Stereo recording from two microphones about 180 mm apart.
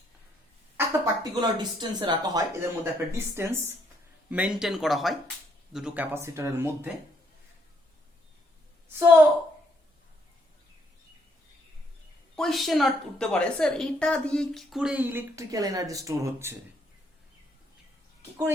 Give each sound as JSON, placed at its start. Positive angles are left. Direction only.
{"t": 0.8, "sound": "a woman's voice", "side_deg": -20}
{"t": 8.9, "sound": "speech", "side_deg": -10}
{"t": 12.4, "sound": "a woman's voice", "side_deg": 0}